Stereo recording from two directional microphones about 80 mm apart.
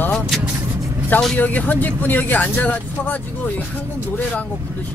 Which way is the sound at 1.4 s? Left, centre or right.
Centre.